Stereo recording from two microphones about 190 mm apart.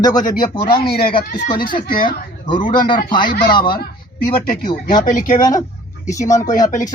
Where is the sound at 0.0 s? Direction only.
20° left (ahead or behind).